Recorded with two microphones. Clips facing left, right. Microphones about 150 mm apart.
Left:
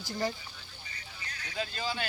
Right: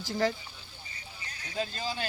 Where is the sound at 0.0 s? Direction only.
90° right.